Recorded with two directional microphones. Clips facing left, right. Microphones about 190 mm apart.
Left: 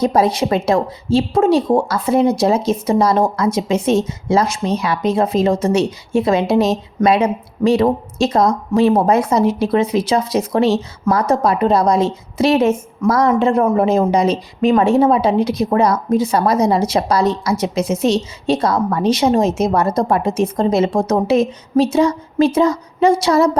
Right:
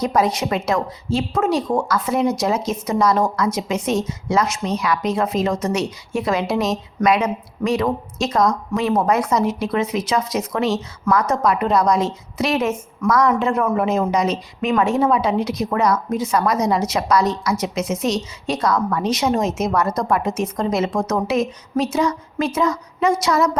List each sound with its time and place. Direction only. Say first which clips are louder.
0.0 s speech: left 4 dB; 30° left (ahead or behind)